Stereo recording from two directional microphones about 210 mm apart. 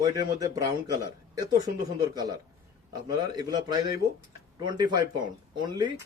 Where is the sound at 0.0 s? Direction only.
15° right (ahead or behind).